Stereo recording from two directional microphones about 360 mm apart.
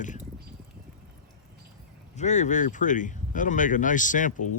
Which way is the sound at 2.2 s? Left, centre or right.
Centre.